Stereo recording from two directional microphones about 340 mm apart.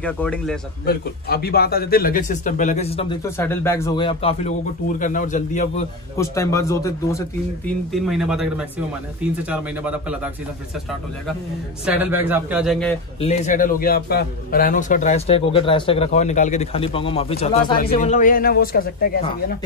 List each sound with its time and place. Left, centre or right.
0.0 s speech: centre
0.8 s a man's voice: left
6.1 s speech: centre
11.8 s speech: centre
13.2 s a man's voice: left